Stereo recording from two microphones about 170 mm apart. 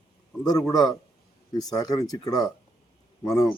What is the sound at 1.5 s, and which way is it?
Speech, 20° left (ahead or behind).